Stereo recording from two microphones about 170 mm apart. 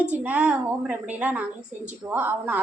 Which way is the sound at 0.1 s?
10° right (ahead or behind).